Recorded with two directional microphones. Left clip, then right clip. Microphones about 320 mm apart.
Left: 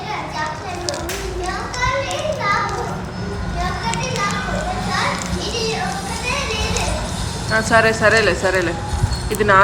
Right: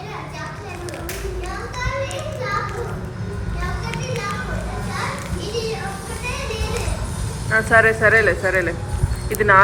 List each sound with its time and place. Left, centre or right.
7.5 s a woman's voice: centre